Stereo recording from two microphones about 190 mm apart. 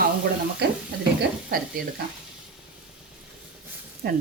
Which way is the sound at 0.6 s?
60° right (ahead or behind).